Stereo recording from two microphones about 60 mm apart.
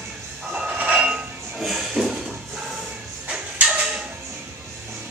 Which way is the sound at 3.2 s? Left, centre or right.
Centre.